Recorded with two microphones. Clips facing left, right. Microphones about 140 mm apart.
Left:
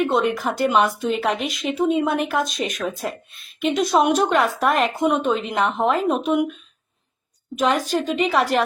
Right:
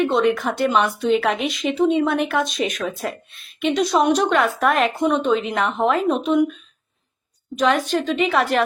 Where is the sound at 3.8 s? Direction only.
55° left (ahead or behind).